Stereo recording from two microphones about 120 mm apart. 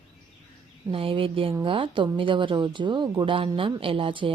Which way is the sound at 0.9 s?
50° right (ahead or behind).